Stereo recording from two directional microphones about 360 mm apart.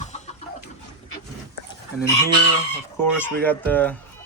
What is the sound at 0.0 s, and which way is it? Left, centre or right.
Chicken, centre.